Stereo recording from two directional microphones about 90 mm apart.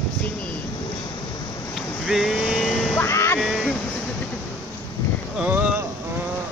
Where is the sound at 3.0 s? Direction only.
30° left (ahead or behind).